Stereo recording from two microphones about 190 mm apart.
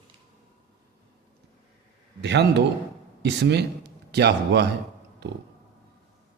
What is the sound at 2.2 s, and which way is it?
Speech, 65° right (ahead or behind).